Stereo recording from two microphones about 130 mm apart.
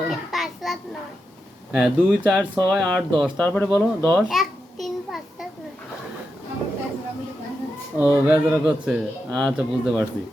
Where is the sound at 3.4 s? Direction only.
15° left (ahead or behind).